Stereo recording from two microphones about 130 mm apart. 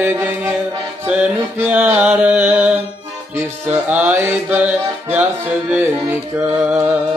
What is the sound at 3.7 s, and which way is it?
Music, 10° right (ahead or behind).